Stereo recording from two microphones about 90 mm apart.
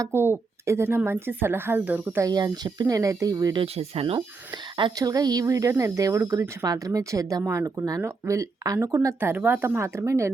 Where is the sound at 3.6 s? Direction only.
90° right.